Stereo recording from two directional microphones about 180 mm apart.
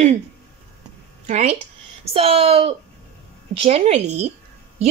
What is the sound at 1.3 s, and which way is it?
Speech, 40° right (ahead or behind).